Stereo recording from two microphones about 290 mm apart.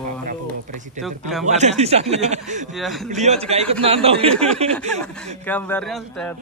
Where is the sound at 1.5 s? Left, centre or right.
Right.